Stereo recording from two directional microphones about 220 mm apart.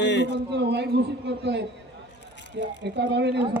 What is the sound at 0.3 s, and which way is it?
A man's voice, 50° right (ahead or behind).